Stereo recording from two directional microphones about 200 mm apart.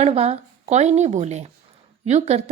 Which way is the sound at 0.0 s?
30° right (ahead or behind).